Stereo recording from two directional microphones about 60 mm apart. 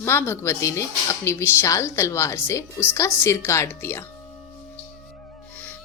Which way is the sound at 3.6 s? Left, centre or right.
Left.